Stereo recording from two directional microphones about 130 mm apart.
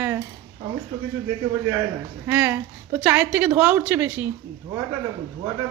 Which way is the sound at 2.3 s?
15° right (ahead or behind).